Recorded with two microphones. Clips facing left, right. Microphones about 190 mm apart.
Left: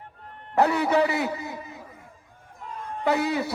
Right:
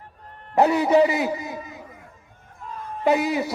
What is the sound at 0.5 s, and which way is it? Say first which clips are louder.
A man's voice: right 4 dB; 20° right (ahead or behind).